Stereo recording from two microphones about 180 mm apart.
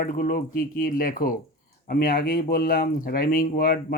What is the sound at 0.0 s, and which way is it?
Speech, 50° left (ahead or behind).